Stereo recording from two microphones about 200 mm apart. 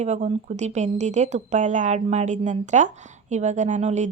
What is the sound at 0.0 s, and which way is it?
Speech, 35° right (ahead or behind).